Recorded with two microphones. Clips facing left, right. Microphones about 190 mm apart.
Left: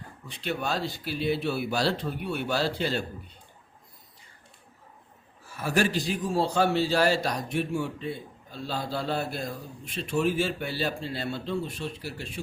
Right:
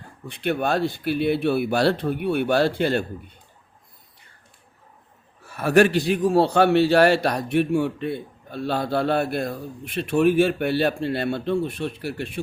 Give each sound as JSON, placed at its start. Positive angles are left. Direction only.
{"t": 0.3, "sound": "a man's voice", "side_deg": -55}
{"t": 5.4, "sound": "a man's voice", "side_deg": -65}